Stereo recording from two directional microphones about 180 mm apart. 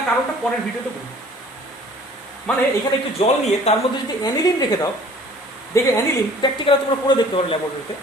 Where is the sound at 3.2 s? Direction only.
35° left (ahead or behind).